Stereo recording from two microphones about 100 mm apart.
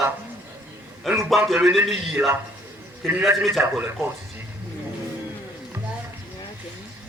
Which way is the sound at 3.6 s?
20° right (ahead or behind).